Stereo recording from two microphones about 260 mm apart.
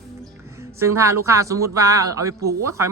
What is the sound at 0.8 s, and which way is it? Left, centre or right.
A man's voice, centre.